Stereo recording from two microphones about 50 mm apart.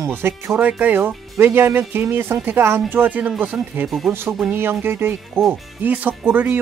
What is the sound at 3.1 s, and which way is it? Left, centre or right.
Speech, right.